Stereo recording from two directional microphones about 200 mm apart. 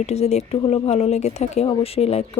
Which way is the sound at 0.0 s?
35° left (ahead or behind).